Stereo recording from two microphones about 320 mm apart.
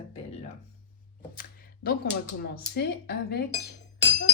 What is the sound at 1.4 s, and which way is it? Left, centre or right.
Speech, left.